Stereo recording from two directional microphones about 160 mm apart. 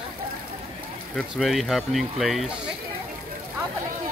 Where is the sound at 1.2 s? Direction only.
Centre (ahead or behind).